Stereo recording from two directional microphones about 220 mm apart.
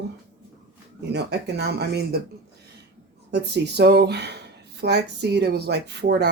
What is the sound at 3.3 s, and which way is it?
Speech, 50° right (ahead or behind).